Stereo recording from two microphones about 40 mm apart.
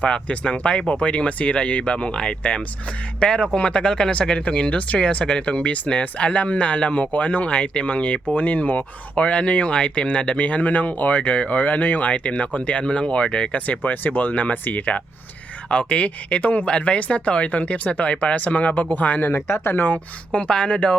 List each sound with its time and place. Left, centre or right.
0.0 s speech: left
12.8 s speech: left
13.7 s speech: left
15.7 s speech: left
16.6 s speech: left
19.3 s speech: left
19.9 s speech: left